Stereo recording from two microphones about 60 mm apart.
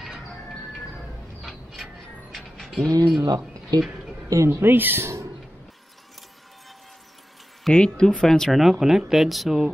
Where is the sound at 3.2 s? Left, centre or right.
Right.